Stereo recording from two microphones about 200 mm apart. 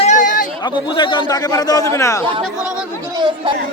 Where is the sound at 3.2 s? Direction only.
20° right (ahead or behind).